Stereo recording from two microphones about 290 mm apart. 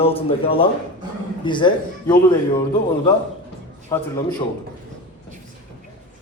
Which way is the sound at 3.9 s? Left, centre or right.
Centre.